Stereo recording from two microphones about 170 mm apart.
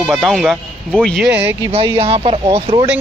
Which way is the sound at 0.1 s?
Centre (ahead or behind).